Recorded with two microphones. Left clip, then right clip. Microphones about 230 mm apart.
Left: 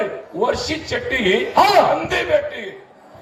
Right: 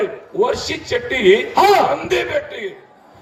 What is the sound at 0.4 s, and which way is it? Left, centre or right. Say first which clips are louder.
Speech: left 1 dB; right.